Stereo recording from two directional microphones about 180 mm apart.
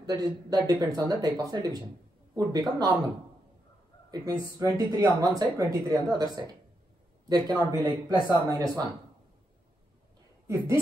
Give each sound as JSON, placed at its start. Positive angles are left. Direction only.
{"t": 0.0, "sound": "speech", "side_deg": -20}
{"t": 4.1, "sound": "speech", "side_deg": -20}
{"t": 10.4, "sound": "a woman's voice", "side_deg": -15}